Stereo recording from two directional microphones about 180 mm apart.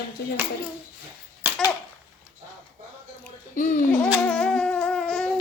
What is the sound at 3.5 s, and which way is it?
Speech, 45° left (ahead or behind).